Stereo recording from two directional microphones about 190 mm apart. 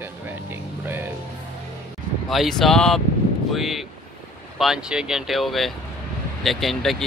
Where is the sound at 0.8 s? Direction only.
10° right (ahead or behind).